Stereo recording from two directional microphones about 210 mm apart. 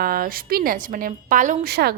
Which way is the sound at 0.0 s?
45° right (ahead or behind).